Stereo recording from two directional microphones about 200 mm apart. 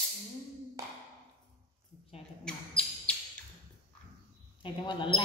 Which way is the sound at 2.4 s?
5° left (ahead or behind).